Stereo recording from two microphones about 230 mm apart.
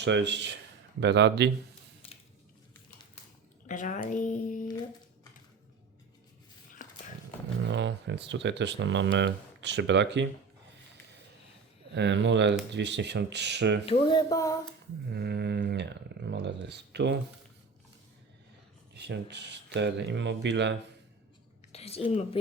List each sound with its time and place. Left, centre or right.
0.0 s speech: right
3.7 s speech: left
6.8 s a sound: left
7.7 s speech: right
11.9 s speech: right
13.8 s a sound: left
15.1 s speech: right
18.9 s speech: right
21.7 s a woman's voice: left